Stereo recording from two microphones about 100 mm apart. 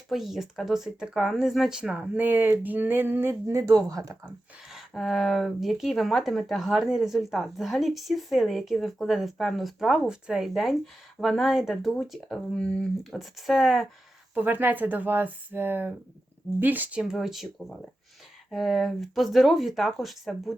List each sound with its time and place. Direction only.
0.1 s speech: centre (ahead or behind); by 4.3 s 30° right (ahead or behind)
4.7 s speech: centre (ahead or behind)
14.3 s speech: 20° right (ahead or behind); by 20.5 s centre (ahead or behind)